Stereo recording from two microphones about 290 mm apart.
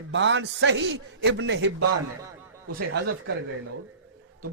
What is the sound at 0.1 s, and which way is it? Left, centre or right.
A man's voice, right.